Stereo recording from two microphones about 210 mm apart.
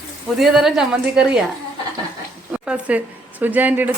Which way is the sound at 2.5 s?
5° right (ahead or behind).